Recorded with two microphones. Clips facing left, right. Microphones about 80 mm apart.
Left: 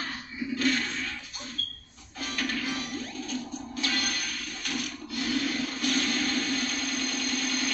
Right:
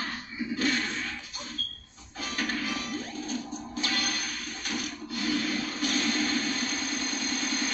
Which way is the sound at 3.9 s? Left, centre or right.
Left.